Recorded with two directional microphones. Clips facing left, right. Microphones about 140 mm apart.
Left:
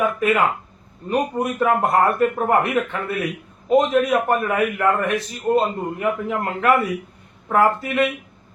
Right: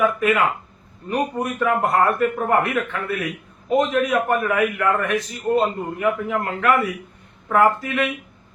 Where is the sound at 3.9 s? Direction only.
30° left (ahead or behind).